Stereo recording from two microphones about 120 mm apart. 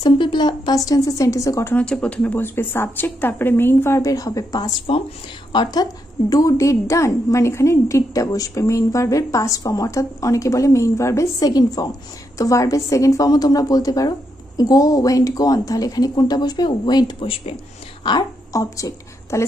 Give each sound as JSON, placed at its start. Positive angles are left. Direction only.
{"t": 0.0, "sound": "a woman's voice", "side_deg": 40}
{"t": 18.0, "sound": "speech", "side_deg": 35}